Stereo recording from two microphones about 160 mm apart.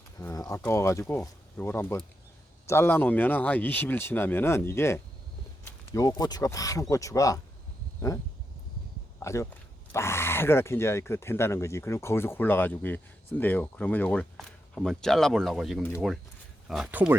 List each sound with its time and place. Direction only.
0.2 s a sound: 20° left (ahead or behind)
0.6 s speech: 15° left (ahead or behind)
9.2 s speech: 20° left (ahead or behind)
16.6 s speech: 5° right (ahead or behind)